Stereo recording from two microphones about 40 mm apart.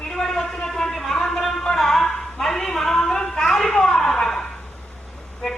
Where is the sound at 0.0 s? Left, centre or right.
Centre.